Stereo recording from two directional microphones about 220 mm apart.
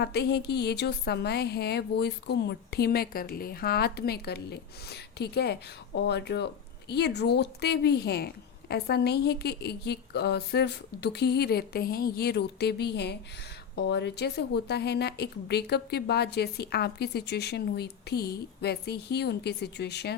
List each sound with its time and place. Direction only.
0.0 s a woman's voice: 50° left (ahead or behind)